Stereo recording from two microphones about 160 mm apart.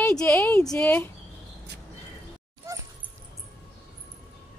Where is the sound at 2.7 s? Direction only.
20° right (ahead or behind).